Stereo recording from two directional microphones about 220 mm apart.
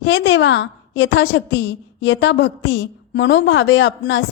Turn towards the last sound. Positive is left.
turn(degrees=55)  # may be behind; listen again after turning